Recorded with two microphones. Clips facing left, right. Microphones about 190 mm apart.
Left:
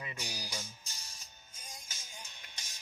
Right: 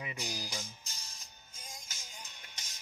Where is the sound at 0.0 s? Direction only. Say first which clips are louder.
Right 3 dB; 15° right (ahead or behind).